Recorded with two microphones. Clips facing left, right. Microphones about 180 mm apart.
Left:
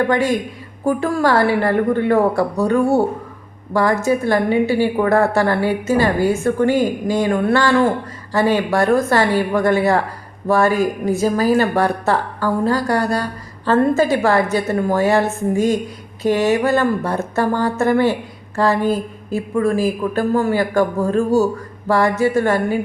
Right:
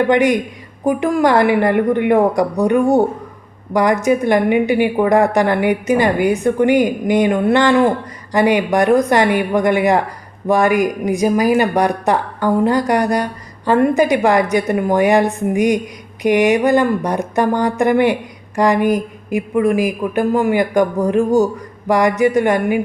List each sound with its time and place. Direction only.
0.1 s speech: 20° right (ahead or behind)